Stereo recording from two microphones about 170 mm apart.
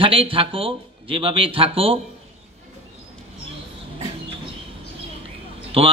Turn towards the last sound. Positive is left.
turn(degrees=-35)  # may be behind; listen again after turning